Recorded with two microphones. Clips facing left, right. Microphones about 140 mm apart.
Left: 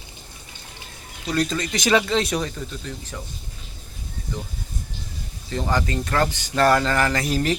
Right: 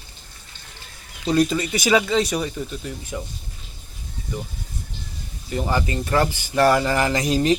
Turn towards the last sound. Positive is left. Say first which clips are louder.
# right 2 dB
turn(degrees=-20)  # may be behind; listen again after turning